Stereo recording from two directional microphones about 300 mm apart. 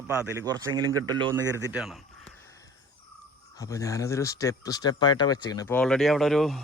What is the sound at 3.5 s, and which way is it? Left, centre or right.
Speech, centre.